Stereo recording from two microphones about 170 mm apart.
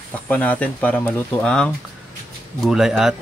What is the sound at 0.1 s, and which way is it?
Speech, 10° left (ahead or behind).